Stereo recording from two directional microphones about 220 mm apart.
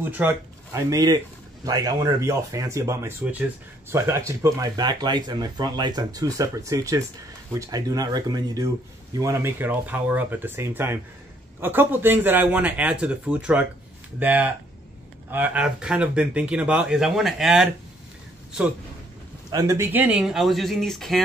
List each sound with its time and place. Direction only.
0.2 s speech: 10° right (ahead or behind)
19.5 s speech: 15° right (ahead or behind); by 21.2 s centre (ahead or behind)